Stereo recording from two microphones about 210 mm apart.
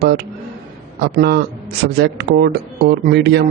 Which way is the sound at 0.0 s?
50° right (ahead or behind).